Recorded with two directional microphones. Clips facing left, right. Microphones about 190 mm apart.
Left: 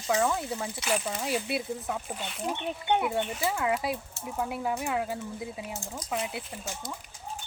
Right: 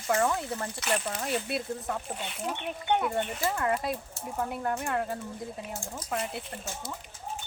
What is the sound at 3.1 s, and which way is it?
Speech, 5° left (ahead or behind).